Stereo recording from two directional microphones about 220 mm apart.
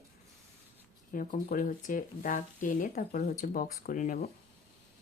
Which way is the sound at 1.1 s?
40° left (ahead or behind).